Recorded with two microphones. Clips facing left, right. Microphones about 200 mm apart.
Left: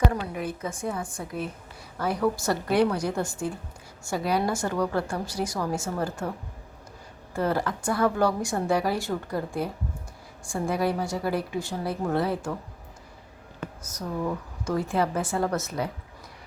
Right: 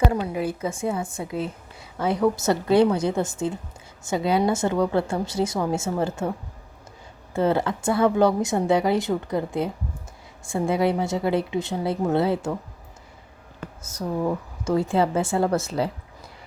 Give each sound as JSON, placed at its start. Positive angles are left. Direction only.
{"t": 0.1, "sound": "speech", "side_deg": -30}
{"t": 7.3, "sound": "speech", "side_deg": -25}
{"t": 13.8, "sound": "speech", "side_deg": -25}